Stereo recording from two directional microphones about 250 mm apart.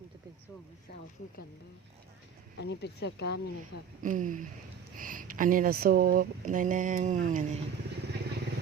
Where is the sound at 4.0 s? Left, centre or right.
Right.